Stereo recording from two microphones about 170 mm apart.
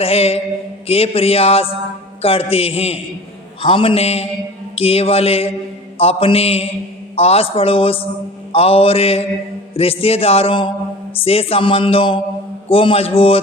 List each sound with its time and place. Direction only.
0.0 s music: 35° left (ahead or behind)